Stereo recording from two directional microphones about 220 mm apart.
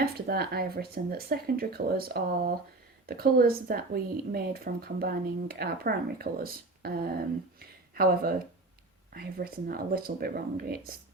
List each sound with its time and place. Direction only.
0.0 s a woman's voice: 45° right (ahead or behind)